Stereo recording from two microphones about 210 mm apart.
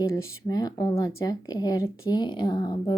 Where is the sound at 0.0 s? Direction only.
15° left (ahead or behind).